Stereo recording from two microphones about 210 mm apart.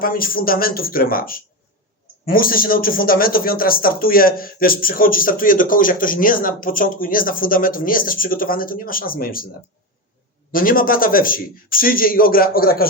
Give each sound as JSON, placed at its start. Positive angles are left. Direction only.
{"t": 0.0, "sound": "speech", "side_deg": 45}
{"t": 10.5, "sound": "speech", "side_deg": 40}